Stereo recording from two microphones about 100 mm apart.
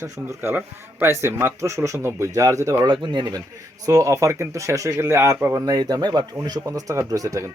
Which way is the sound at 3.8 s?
35° right (ahead or behind).